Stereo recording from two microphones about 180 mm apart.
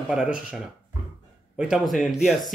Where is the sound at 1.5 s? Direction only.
Centre (ahead or behind).